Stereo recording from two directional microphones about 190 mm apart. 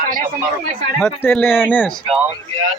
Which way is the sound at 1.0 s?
10° left (ahead or behind).